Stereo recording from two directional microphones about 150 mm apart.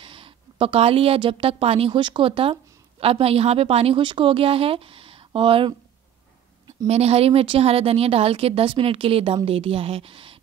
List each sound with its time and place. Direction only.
0.0 s a woman's voice: 35° right (ahead or behind)
6.9 s a woman's voice: 45° right (ahead or behind)